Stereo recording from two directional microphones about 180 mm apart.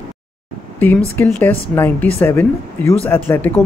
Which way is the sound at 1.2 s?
10° left (ahead or behind).